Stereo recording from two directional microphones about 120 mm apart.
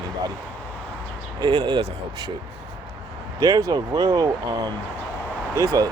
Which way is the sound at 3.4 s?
30° right (ahead or behind).